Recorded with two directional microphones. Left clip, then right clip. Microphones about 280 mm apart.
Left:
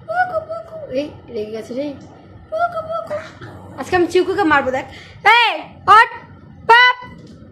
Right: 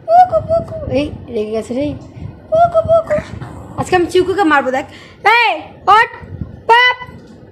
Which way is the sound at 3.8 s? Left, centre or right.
Right.